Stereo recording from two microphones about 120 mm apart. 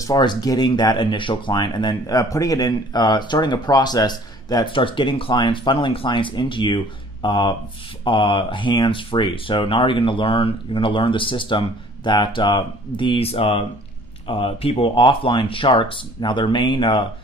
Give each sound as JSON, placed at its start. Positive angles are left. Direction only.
{"t": 0.0, "sound": "speech", "side_deg": 35}